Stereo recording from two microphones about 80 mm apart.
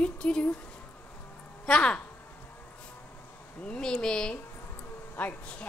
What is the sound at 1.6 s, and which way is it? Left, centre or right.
Speech, centre.